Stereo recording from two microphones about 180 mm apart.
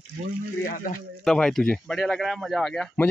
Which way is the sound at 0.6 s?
50° left (ahead or behind).